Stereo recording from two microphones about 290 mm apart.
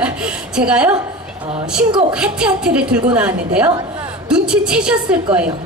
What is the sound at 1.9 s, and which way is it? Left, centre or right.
Speech, centre.